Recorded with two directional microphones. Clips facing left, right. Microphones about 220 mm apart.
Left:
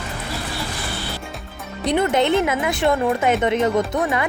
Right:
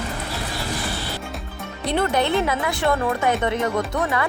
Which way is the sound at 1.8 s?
20° left (ahead or behind).